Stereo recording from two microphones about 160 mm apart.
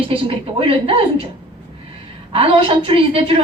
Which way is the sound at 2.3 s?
35° right (ahead or behind).